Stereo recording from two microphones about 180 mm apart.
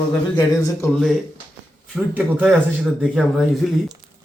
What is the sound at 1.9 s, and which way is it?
A man's voice, 10° right (ahead or behind).